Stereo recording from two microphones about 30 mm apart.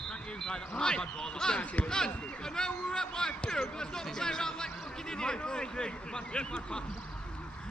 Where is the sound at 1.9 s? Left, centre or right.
Left.